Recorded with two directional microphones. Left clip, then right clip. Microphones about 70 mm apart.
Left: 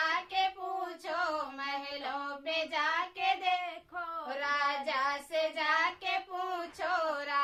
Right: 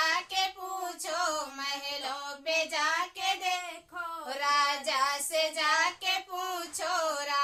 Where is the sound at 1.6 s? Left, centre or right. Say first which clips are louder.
Right 2 dB; right.